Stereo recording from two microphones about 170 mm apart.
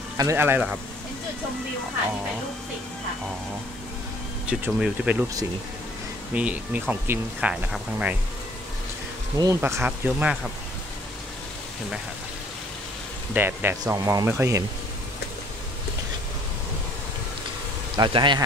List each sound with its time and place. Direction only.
0.2 s speech: 15° right (ahead or behind)
4.5 s speech: 5° right (ahead or behind)
6.3 s speech: 10° right (ahead or behind)
9.4 s speech: 15° right (ahead or behind)
13.3 s speech: 10° right (ahead or behind)
17.9 s a man's voice: 25° right (ahead or behind)